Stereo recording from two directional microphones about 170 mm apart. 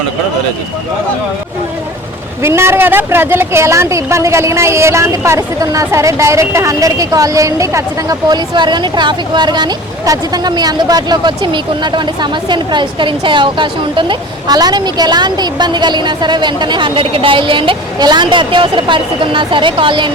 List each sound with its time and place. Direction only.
2.4 s a woman's voice: 15° right (ahead or behind)